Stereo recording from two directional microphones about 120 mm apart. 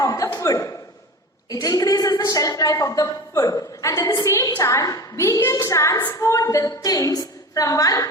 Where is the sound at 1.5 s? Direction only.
30° left (ahead or behind).